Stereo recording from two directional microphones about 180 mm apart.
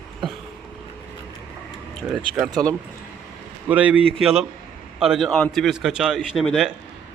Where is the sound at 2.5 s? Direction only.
20° right (ahead or behind).